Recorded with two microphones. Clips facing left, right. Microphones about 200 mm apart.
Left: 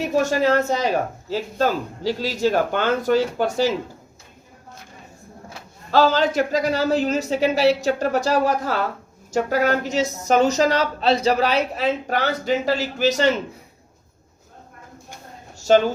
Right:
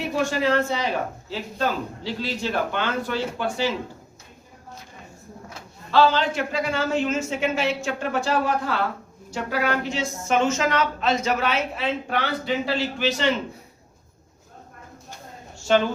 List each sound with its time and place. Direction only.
0.0 s a woman's voice: 40° left (ahead or behind)
5.9 s a woman's voice: 40° left (ahead or behind)
15.5 s a sound: 40° left (ahead or behind)